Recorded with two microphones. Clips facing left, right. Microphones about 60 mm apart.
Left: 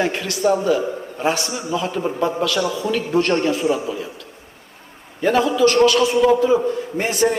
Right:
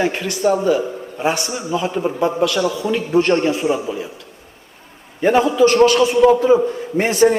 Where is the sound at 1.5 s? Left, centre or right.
Centre.